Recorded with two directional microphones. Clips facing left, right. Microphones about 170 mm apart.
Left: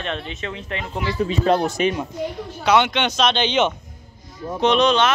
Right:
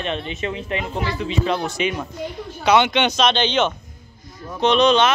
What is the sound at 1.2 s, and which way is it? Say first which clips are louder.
Speech: left 6 dB; 45° left (ahead or behind).